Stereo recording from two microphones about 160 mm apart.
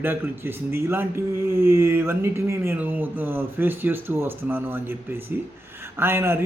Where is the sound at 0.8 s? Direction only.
15° right (ahead or behind).